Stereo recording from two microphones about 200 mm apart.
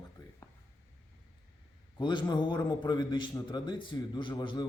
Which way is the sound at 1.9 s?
20° left (ahead or behind).